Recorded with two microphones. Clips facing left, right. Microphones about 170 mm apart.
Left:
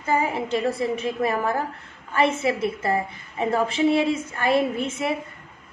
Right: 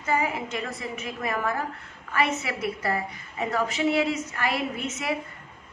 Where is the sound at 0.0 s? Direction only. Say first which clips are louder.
Left 3 dB; 30° left (ahead or behind).